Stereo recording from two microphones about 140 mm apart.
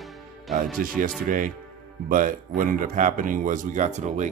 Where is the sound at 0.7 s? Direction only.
80° right.